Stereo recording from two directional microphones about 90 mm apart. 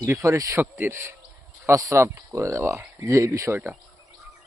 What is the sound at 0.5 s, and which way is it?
Speech, 25° right (ahead or behind).